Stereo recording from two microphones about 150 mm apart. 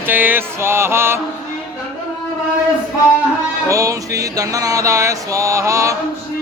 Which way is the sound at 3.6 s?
20° right (ahead or behind).